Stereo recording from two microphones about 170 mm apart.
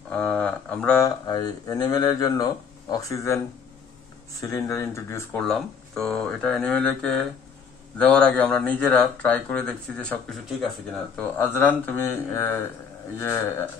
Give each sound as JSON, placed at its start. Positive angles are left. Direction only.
{"t": 0.1, "sound": "speech", "side_deg": 5}
{"t": 1.0, "sound": "speech", "side_deg": 25}
{"t": 4.4, "sound": "speech", "side_deg": 15}
{"t": 5.4, "sound": "speech", "side_deg": 5}